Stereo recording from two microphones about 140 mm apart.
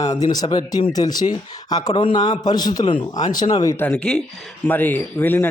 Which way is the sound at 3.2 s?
55° left (ahead or behind).